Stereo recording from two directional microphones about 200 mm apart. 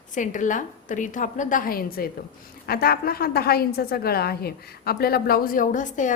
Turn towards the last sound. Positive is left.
turn(degrees=40)  # may be behind; listen again after turning